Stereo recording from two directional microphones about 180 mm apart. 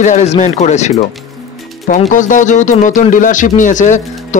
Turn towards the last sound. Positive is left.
turn(degrees=45)  # may be behind; listen again after turning